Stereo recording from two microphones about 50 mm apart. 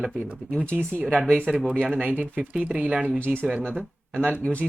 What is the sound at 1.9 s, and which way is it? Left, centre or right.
Speech, right.